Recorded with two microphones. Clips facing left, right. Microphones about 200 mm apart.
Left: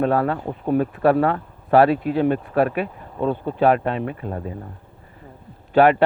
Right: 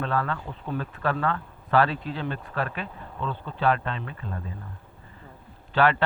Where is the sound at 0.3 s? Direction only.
45° left (ahead or behind).